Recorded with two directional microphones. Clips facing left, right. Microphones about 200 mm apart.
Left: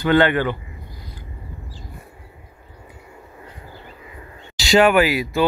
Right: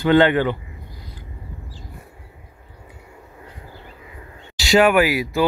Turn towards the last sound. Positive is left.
turn(degrees=-5)  # may be behind; listen again after turning